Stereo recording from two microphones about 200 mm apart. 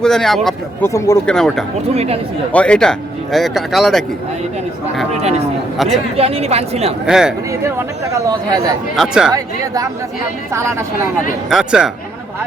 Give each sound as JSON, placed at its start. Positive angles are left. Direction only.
{"t": 0.0, "sound": "speech", "side_deg": 0}
{"t": 0.9, "sound": "speech", "side_deg": 15}
{"t": 1.3, "sound": "speech", "side_deg": 5}
{"t": 2.0, "sound": "speech", "side_deg": -30}
{"t": 2.5, "sound": "speech", "side_deg": 5}
{"t": 5.7, "sound": "speech", "side_deg": 0}
{"t": 6.1, "sound": "speech", "side_deg": -30}
{"t": 7.0, "sound": "speech", "side_deg": -5}
{"t": 7.6, "sound": "speech", "side_deg": -15}
{"t": 9.0, "sound": "speech", "side_deg": -5}
{"t": 10.5, "sound": "speech", "side_deg": -15}
{"t": 11.4, "sound": "speech", "side_deg": -5}